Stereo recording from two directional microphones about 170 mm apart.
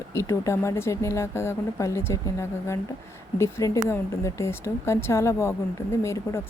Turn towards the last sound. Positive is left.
turn(degrees=15)  # may be behind; listen again after turning